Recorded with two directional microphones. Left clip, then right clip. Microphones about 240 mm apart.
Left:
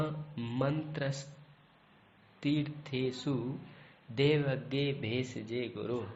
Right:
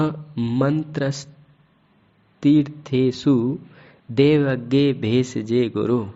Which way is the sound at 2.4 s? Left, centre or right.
Right.